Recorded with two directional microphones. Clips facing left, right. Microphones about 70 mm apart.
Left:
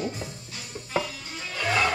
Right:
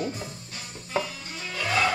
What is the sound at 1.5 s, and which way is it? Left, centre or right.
Music, centre.